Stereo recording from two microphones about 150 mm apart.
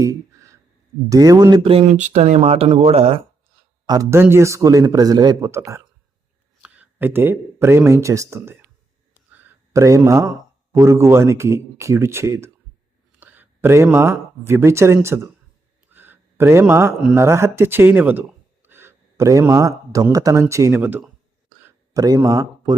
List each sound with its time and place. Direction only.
0.0 s a sound: 20° right (ahead or behind)
1.1 s a man's voice: 25° right (ahead or behind)
1.6 s speech: 40° right (ahead or behind)
2.0 s speech: 50° right (ahead or behind)
3.8 s a man's voice: 20° right (ahead or behind)
15.9 s a sound: 15° right (ahead or behind)
17.2 s a man's voice: 20° right (ahead or behind)
21.9 s a man's voice: 25° right (ahead or behind)